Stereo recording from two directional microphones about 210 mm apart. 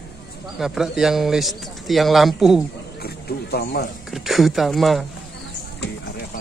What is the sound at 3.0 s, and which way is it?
Speech, 50° left (ahead or behind).